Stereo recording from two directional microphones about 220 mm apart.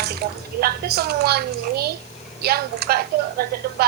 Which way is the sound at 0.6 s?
45° right (ahead or behind).